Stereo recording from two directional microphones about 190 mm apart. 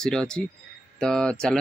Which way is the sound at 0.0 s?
5° left (ahead or behind).